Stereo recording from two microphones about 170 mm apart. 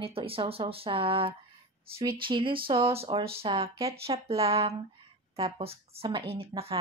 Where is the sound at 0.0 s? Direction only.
35° right (ahead or behind).